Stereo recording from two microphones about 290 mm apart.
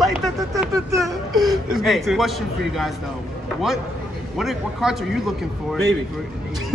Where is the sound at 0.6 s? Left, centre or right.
Centre.